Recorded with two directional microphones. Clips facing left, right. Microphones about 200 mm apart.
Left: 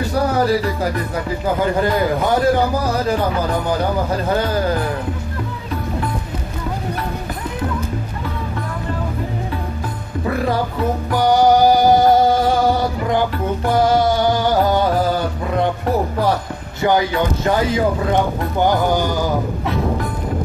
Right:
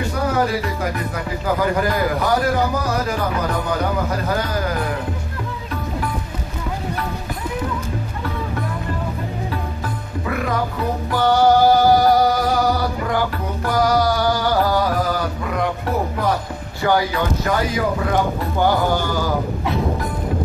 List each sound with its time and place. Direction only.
1.6 s a man's voice: 25° left (ahead or behind)
4.1 s a man's voice: 30° left (ahead or behind)
10.2 s music: 30° left (ahead or behind)
11.1 s music: 15° left (ahead or behind)
16.8 s a man's voice: 20° left (ahead or behind)